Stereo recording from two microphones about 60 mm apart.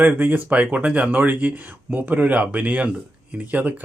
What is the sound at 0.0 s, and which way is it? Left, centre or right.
Speech, right.